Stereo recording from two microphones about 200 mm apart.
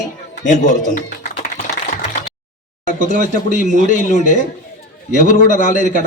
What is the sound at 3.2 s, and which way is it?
A man's voice, 40° left (ahead or behind).